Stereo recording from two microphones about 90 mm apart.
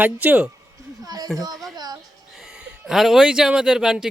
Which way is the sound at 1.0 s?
45° right (ahead or behind).